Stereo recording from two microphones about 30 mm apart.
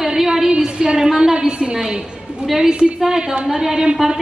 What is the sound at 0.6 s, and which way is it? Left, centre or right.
Speech, right.